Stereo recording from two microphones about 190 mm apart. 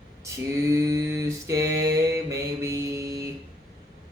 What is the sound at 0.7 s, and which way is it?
Mantra, 15° right (ahead or behind).